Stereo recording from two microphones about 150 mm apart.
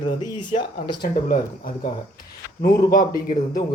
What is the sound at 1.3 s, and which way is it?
Speech, 65° left (ahead or behind).